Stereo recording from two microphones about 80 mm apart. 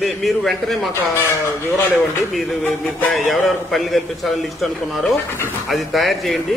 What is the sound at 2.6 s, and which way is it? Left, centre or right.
Music, left.